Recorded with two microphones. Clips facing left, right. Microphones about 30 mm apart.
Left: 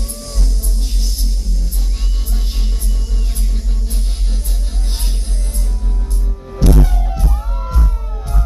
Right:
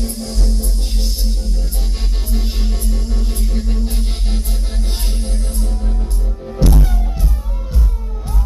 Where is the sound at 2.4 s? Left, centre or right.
Right.